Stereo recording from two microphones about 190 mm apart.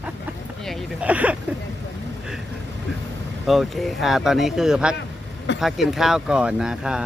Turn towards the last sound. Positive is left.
turn(degrees=-5)  # may be behind; listen again after turning